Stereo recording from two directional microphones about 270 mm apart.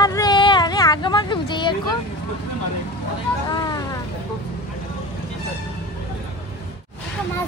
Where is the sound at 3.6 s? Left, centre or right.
Centre.